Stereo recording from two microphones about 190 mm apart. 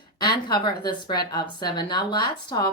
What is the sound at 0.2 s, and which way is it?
A woman's voice, 20° left (ahead or behind).